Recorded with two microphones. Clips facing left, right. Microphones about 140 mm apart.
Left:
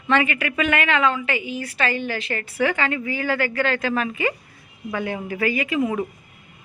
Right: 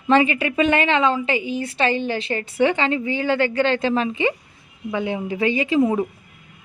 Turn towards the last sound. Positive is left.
turn(degrees=-25)  # may be behind; listen again after turning